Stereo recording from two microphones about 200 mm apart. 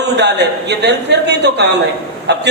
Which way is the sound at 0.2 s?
60° right (ahead or behind).